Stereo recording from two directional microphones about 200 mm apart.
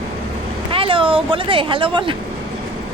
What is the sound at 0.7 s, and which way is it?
Speech, 25° right (ahead or behind).